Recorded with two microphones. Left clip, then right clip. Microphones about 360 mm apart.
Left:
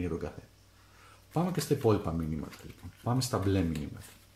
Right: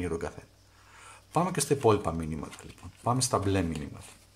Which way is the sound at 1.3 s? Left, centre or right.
Right.